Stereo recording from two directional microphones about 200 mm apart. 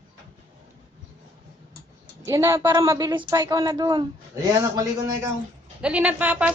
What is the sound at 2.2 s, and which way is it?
A woman's voice, 15° right (ahead or behind).